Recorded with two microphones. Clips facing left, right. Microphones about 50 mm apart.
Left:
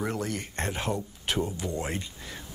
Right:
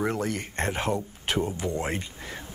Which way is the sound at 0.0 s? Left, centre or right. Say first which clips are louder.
Right 3 dB; right.